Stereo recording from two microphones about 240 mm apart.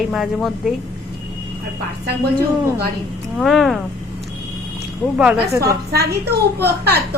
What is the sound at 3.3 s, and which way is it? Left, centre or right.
Speech, centre.